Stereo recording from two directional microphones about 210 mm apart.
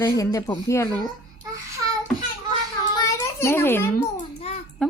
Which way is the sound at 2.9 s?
10° left (ahead or behind).